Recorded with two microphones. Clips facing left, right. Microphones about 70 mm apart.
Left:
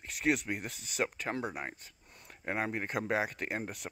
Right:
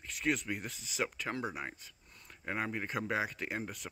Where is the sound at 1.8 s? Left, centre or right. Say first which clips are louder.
Left 1 dB; left.